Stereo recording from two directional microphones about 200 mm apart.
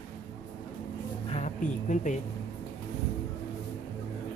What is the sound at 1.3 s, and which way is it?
Speech, 35° left (ahead or behind).